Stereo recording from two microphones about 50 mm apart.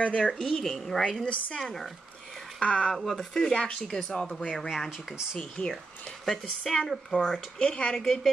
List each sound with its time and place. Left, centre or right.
0.0 s speech: left
0.3 s a woman's voice: centre
2.6 s speech: left
2.9 s speech: centre
4.6 s a woman's voice: centre
5.6 s speech: centre
6.2 s speech: centre; by 7.9 s left
7.9 s a woman's voice: centre